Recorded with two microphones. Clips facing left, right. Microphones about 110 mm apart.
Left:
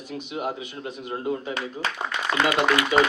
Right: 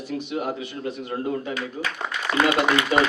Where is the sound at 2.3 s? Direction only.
25° left (ahead or behind).